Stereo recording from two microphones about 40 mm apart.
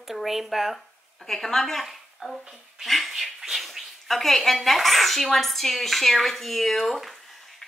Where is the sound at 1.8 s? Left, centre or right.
Centre.